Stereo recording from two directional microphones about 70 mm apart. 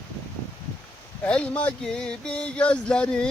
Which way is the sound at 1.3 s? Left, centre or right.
Centre.